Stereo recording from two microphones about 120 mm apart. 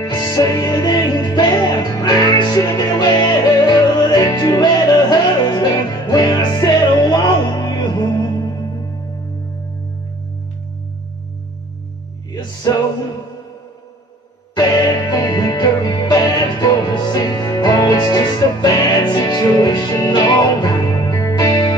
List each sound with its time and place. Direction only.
0.0 s music: 35° left (ahead or behind)
14.5 s music: 35° left (ahead or behind)